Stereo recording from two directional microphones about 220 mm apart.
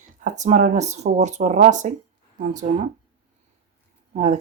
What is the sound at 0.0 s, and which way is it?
Speech, 35° right (ahead or behind).